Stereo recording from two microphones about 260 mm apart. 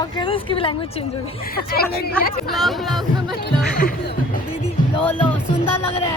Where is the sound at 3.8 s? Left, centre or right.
Left.